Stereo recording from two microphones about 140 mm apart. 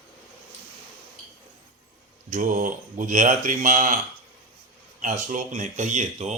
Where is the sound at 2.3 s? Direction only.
70° right (ahead or behind).